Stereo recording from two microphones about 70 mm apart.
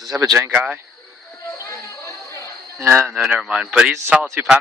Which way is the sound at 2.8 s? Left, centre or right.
Right.